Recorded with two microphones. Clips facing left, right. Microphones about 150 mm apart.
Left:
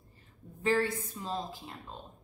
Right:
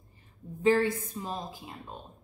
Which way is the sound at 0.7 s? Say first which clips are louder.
Right 5 dB; 15° right (ahead or behind).